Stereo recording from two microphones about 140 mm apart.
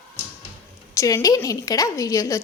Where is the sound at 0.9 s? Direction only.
25° left (ahead or behind).